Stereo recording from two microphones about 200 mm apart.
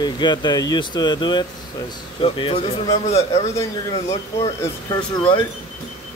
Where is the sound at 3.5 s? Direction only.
15° left (ahead or behind).